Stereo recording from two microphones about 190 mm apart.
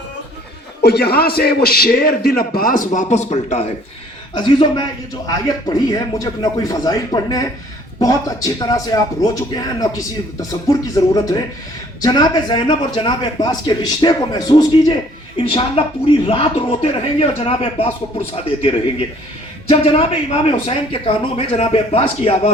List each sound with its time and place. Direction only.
0.8 s a man's voice: 55° left (ahead or behind); by 22.5 s 30° left (ahead or behind)